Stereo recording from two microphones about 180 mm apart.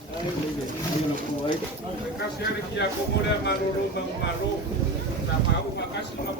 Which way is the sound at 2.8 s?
70° left (ahead or behind).